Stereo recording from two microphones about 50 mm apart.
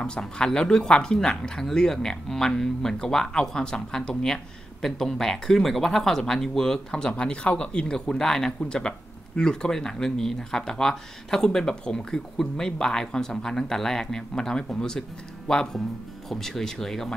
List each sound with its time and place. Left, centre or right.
0.0 s speech: centre